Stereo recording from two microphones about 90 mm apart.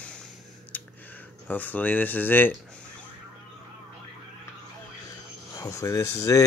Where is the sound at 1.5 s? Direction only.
20° left (ahead or behind).